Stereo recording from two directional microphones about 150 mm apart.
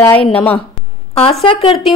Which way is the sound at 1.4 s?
40° left (ahead or behind).